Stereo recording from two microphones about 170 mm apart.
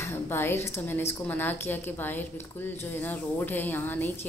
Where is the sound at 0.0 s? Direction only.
15° left (ahead or behind).